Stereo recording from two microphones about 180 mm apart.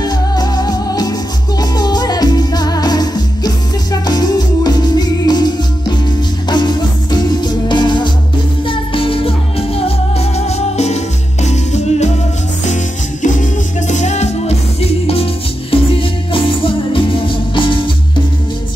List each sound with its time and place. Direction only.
0.0 s music: 20° left (ahead or behind); by 12.1 s 40° left (ahead or behind)
13.2 s music: 45° left (ahead or behind); by 17.9 s 25° left (ahead or behind)